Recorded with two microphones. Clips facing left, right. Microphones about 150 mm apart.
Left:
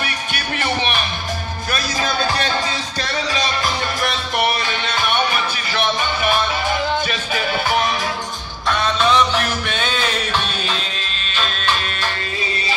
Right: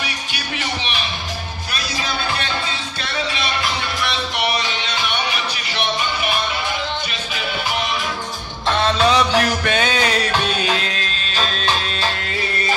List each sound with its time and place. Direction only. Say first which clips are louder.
0.0 s music: left 3 dB; 50° left (ahead or behind)
8.6 s music: right 1 dB; 30° right (ahead or behind)
11.3 s music: even; 35° right (ahead or behind)